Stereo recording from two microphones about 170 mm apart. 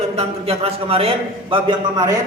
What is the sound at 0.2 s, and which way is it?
A man's voice, 35° right (ahead or behind).